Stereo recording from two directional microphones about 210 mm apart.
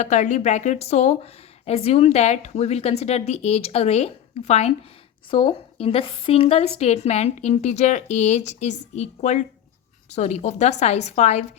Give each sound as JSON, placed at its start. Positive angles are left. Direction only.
{"t": 0.0, "sound": "speech", "side_deg": 35}